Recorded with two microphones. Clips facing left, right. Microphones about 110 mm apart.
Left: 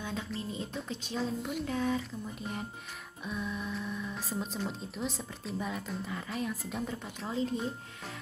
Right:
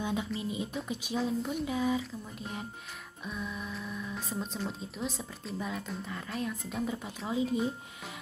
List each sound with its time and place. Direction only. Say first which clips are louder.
0.0 s speech: right 4 dB; 15° right (ahead or behind)